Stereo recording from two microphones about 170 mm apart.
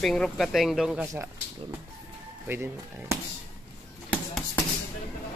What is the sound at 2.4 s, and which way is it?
Speech, 10° right (ahead or behind).